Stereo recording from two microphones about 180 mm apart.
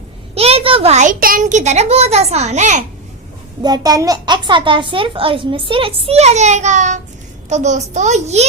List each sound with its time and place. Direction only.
0.3 s a child's voice: 35° right (ahead or behind)
3.6 s a child's voice: 20° right (ahead or behind); by 8.4 s 40° right (ahead or behind)